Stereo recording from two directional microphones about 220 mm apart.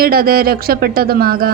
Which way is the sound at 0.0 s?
45° right (ahead or behind).